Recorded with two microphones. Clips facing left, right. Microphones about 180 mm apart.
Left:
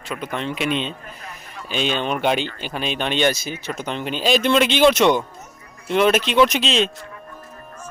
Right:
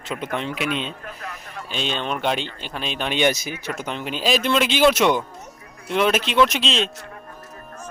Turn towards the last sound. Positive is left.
turn(degrees=0)  # may be behind; listen again after turning